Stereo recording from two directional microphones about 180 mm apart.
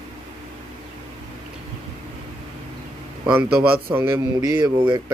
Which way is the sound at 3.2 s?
5° right (ahead or behind).